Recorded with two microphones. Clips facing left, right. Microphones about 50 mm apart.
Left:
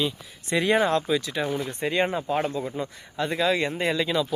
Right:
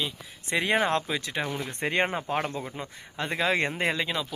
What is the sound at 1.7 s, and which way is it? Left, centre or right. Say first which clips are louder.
Speech: left 2 dB; right.